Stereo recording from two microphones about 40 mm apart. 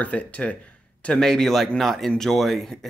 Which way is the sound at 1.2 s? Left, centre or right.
Centre.